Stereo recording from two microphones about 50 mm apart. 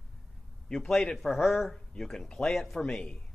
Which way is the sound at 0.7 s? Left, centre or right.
Centre.